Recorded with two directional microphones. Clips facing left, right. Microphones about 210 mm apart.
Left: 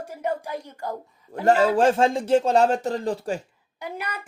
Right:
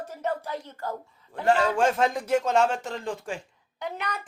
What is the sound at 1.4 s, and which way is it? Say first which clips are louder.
Speech: left 4 dB; 40° left (ahead or behind).